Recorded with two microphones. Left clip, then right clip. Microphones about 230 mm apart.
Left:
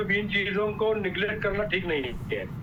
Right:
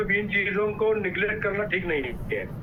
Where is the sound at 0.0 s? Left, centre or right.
Centre.